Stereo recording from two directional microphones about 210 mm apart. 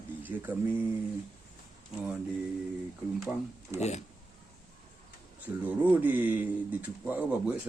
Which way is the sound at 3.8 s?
30° left (ahead or behind).